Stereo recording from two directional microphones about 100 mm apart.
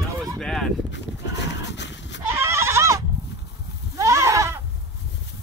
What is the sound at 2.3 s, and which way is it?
Goat, 25° right (ahead or behind).